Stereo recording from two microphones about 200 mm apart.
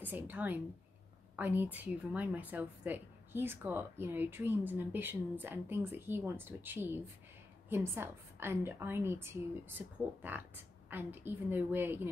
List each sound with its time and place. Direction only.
0.0 s a woman's voice: 10° right (ahead or behind)